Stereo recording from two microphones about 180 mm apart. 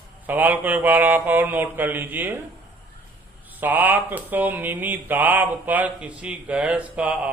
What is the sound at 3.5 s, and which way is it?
Speech, 10° right (ahead or behind).